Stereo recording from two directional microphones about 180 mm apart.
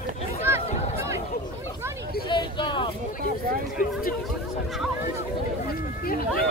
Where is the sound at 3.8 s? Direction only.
50° left (ahead or behind).